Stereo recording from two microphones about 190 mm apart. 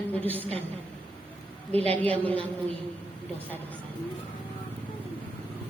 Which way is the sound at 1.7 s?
30° right (ahead or behind).